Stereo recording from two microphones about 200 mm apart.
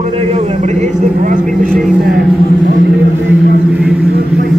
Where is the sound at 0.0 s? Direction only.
30° right (ahead or behind).